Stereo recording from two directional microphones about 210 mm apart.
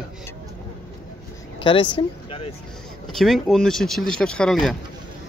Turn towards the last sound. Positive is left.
turn(degrees=0)  # may be behind; listen again after turning